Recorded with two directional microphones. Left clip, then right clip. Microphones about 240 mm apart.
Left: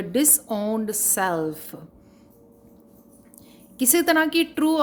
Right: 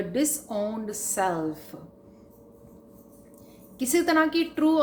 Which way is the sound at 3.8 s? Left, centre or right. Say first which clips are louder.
Left 3 dB; left.